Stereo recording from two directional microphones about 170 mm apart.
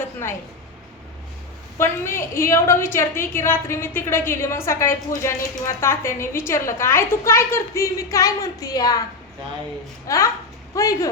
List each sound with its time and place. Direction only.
1.8 s a woman's voice: 15° left (ahead or behind)
10.1 s speech: 20° left (ahead or behind)